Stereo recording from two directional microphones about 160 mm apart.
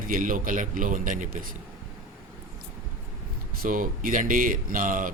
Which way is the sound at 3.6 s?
60° right (ahead or behind).